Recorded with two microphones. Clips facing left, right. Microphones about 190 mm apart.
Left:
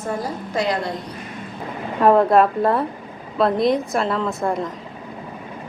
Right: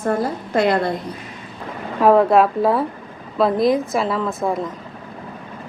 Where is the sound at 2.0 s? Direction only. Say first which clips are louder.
Right 1 dB; centre (ahead or behind).